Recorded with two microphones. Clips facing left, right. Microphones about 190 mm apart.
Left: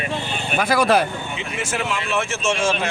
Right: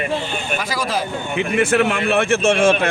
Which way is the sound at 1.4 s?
60° right (ahead or behind).